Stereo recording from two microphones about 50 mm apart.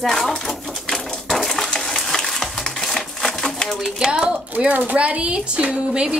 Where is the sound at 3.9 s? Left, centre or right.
Centre.